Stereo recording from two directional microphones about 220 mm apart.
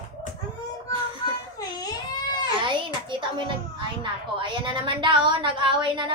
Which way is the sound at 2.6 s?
20° right (ahead or behind).